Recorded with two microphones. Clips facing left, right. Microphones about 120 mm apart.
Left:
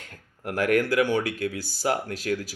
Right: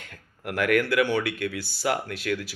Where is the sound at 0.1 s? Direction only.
35° left (ahead or behind).